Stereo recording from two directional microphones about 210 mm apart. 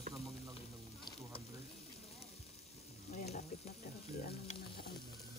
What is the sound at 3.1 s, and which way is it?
Frying, 35° left (ahead or behind).